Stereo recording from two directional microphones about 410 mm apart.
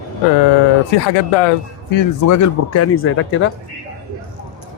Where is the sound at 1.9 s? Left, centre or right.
Left.